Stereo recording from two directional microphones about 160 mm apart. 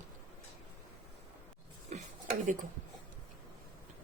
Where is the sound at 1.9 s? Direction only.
45° right (ahead or behind).